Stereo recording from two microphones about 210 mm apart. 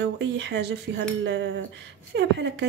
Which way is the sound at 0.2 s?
55° right (ahead or behind).